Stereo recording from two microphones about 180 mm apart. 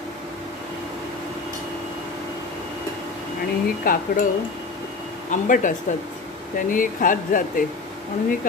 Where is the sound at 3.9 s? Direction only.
50° left (ahead or behind).